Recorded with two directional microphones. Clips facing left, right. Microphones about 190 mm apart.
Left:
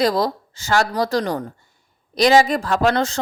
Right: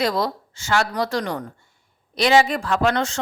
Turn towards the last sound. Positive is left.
turn(degrees=35)  # may be behind; listen again after turning